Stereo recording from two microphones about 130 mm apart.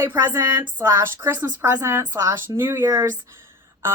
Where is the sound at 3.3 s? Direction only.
20° right (ahead or behind).